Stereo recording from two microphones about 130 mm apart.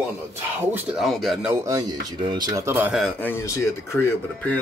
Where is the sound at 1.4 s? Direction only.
20° right (ahead or behind).